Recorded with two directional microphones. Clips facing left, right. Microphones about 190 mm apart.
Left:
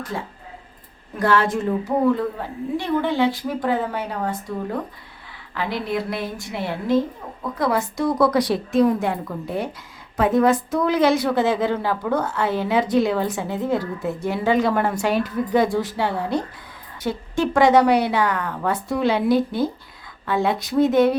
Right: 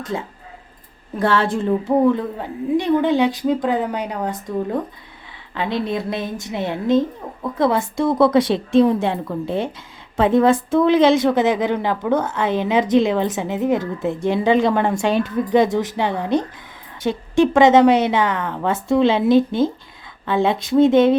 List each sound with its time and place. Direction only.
0.0 s a woman's voice: 20° right (ahead or behind)
5.5 s a woman's voice: 20° right (ahead or behind)